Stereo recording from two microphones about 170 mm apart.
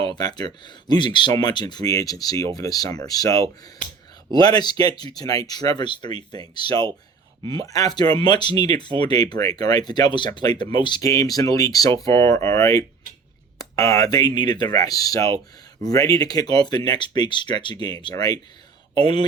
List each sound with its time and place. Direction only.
0.2 s speech: 25° left (ahead or behind)